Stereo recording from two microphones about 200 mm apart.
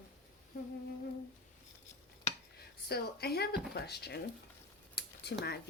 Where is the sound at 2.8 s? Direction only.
50° left (ahead or behind).